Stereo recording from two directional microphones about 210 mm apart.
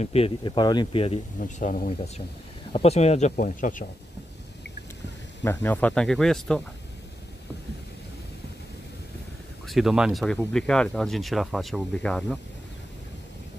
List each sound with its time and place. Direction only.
0.0 s speech: 30° left (ahead or behind)
1.4 s speech: 40° left (ahead or behind)
5.4 s speech: 10° left (ahead or behind)
9.7 s speech: centre (ahead or behind)